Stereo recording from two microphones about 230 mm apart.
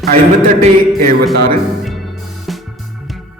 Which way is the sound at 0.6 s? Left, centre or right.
Right.